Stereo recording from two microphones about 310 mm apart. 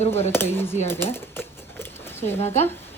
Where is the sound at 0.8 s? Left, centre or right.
Centre.